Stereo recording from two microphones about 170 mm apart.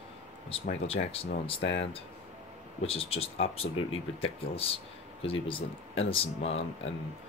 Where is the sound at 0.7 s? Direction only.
35° left (ahead or behind).